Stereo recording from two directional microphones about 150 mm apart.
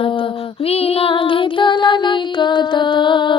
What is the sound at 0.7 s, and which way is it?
Music, 40° left (ahead or behind).